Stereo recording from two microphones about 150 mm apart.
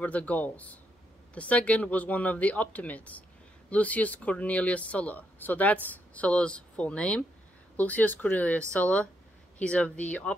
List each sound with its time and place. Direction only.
0.0 s speech: 10° left (ahead or behind)